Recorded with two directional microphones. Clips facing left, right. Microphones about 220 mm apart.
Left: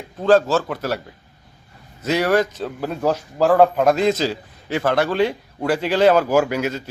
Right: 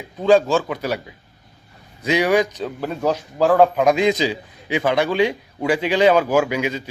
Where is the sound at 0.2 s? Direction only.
5° left (ahead or behind).